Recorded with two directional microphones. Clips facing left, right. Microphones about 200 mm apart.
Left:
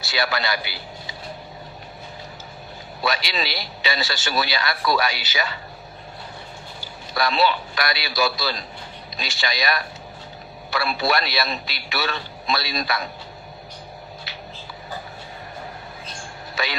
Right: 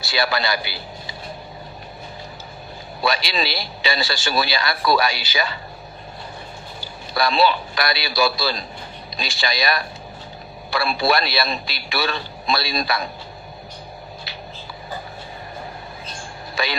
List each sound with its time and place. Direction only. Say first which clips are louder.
0.0 s a man's voice: right 2 dB; 30° right (ahead or behind)
3.0 s a man's voice: right 3 dB; 30° right (ahead or behind)
7.1 s a man's voice: right 2 dB; 30° right (ahead or behind)